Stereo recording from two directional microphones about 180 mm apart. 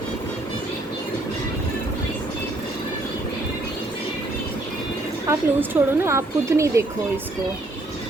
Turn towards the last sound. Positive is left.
turn(degrees=-15)  # may be behind; listen again after turning